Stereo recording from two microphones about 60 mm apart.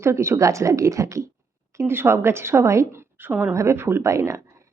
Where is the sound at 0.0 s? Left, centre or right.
Right.